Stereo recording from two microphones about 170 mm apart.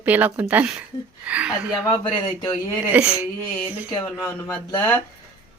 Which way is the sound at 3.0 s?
5° right (ahead or behind).